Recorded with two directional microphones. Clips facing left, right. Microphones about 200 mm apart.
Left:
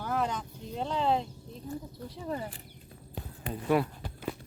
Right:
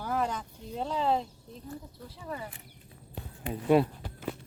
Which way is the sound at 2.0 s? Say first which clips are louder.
Left 4 dB; 30° left (ahead or behind).